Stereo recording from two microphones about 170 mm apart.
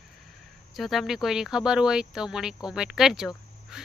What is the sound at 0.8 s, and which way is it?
Speech, centre (ahead or behind).